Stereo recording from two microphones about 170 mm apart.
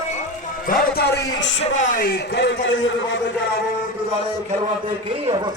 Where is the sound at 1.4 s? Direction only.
90° left.